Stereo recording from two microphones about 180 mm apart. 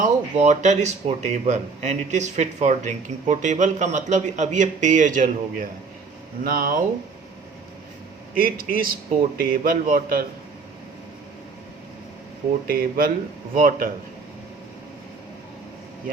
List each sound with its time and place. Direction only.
0.0 s a man's voice: 40° right (ahead or behind)
8.4 s a man's voice: 55° right (ahead or behind)
12.6 s a man's voice: 50° right (ahead or behind)